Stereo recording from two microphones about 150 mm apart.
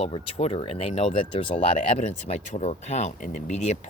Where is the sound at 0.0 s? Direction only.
45° left (ahead or behind).